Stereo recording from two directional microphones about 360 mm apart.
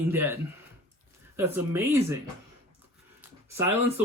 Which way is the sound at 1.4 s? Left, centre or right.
Centre.